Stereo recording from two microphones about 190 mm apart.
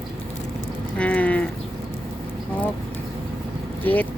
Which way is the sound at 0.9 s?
10° left (ahead or behind).